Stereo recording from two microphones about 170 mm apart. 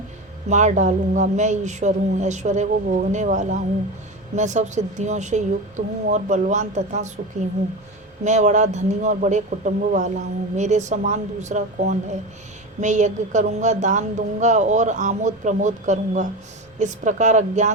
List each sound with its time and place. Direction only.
0.5 s speech: 45° right (ahead or behind)
8.2 s speech: 45° right (ahead or behind)